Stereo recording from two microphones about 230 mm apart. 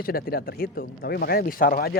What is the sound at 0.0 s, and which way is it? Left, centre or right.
Speech, left.